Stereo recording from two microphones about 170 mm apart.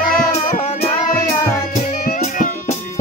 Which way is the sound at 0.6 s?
35° left (ahead or behind).